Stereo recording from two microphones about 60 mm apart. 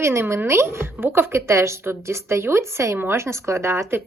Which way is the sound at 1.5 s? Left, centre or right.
Right.